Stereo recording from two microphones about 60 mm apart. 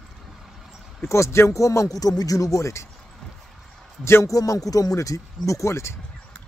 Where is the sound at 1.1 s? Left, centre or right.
Left.